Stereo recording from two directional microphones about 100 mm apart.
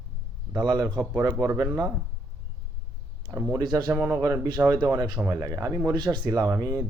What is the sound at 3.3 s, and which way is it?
Speech, 25° right (ahead or behind).